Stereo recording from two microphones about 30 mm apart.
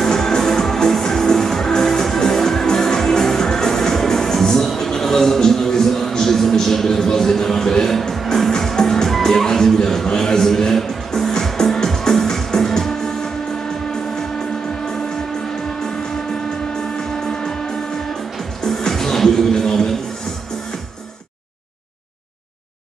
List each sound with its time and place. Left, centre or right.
0.0 s music: centre
6.5 s a sound: centre
8.5 s music: centre
10.0 s music: left
17.2 s music: centre
18.6 s music: centre